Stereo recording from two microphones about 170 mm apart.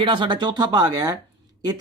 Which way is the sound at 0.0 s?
30° right (ahead or behind).